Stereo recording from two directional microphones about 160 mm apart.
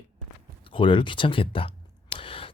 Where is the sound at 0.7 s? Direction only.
30° left (ahead or behind).